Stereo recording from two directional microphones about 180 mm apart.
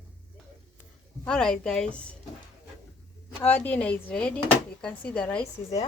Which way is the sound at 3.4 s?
10° left (ahead or behind).